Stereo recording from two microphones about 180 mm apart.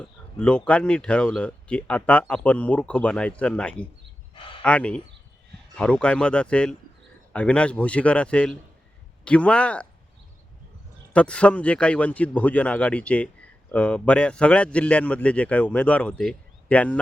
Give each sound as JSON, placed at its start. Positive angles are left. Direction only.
{"t": 0.0, "sound": "a man's voice", "side_deg": 5}
{"t": 11.1, "sound": "a man's voice", "side_deg": 5}